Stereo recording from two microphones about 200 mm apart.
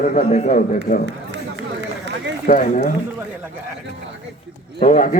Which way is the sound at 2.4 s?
35° left (ahead or behind).